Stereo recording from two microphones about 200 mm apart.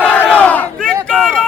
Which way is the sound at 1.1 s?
Centre (ahead or behind).